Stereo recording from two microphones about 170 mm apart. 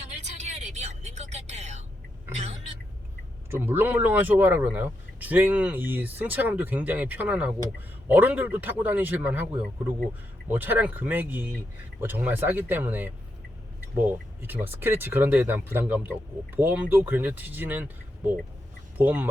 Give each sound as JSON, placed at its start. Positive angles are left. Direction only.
{"t": 0.4, "sound": "vehicle", "side_deg": -40}
{"t": 3.5, "sound": "speech", "side_deg": -15}